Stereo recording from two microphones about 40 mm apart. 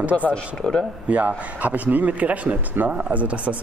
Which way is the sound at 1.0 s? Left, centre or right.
Right.